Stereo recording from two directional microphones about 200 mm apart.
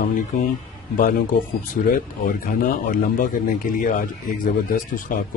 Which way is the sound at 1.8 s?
40° left (ahead or behind).